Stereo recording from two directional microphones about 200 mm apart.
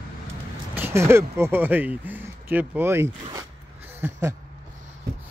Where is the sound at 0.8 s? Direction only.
15° right (ahead or behind).